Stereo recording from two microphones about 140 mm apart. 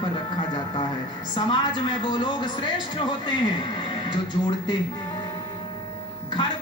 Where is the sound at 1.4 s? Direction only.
35° left (ahead or behind).